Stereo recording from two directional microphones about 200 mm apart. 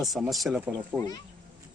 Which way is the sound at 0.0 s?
Centre (ahead or behind).